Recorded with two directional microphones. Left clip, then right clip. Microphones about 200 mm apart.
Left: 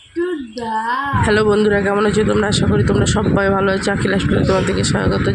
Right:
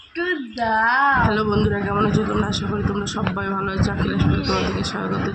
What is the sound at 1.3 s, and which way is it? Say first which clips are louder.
Speech: left 7 dB; 25° left (ahead or behind).